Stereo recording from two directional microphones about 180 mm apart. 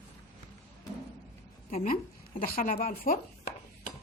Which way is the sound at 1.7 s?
40° left (ahead or behind).